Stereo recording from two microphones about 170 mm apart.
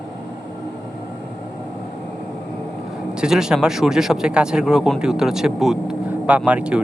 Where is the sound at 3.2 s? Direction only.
5° right (ahead or behind).